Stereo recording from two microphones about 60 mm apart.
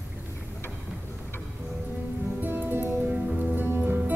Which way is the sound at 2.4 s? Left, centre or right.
Right.